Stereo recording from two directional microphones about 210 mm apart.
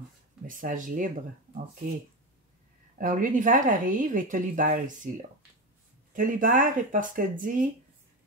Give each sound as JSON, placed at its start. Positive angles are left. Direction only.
{"t": 0.5, "sound": "a woman's voice", "side_deg": -40}
{"t": 3.0, "sound": "a woman's voice", "side_deg": -40}
{"t": 6.1, "sound": "a woman's voice", "side_deg": -40}